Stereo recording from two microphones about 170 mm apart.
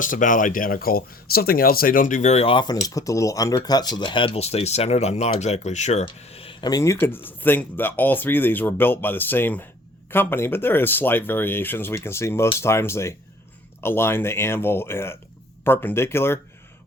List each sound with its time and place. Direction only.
0.0 s speech: 50° left (ahead or behind); by 16.4 s 15° left (ahead or behind)